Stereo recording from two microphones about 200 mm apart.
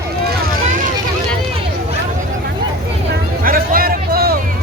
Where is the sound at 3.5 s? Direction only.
45° right (ahead or behind).